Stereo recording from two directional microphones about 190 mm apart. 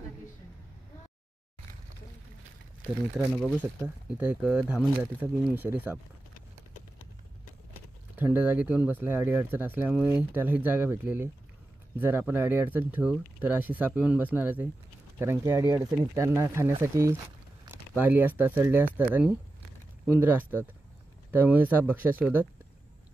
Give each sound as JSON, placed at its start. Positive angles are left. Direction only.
{"t": 4.1, "sound": "speech", "side_deg": -5}
{"t": 8.2, "sound": "speech", "side_deg": -10}